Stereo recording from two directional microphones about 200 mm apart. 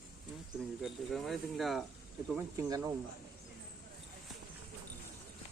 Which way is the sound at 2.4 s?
15° right (ahead or behind).